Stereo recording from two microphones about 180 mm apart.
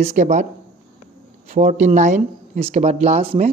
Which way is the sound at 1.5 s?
45° right (ahead or behind).